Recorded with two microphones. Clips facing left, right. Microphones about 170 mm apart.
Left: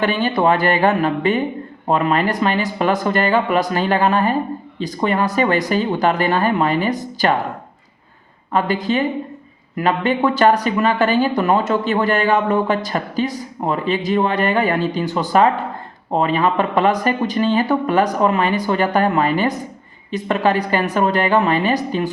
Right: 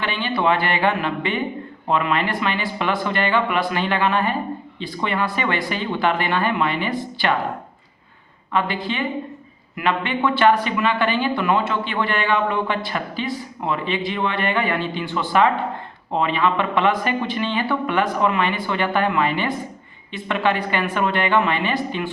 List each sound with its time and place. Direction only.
0.0 s speech: 45° left (ahead or behind)
8.5 s speech: 40° left (ahead or behind)